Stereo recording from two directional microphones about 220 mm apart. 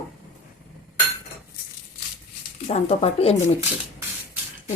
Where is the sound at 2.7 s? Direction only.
30° left (ahead or behind).